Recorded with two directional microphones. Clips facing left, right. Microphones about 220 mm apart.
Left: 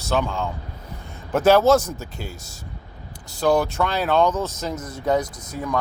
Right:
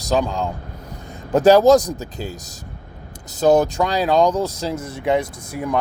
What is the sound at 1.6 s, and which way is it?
Speech, 15° right (ahead or behind).